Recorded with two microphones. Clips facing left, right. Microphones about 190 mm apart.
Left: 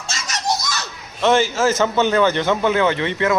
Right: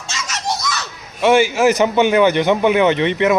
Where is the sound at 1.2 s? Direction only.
10° right (ahead or behind).